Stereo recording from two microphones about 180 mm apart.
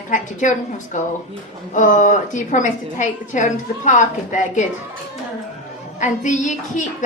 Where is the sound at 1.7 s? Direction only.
45° left (ahead or behind).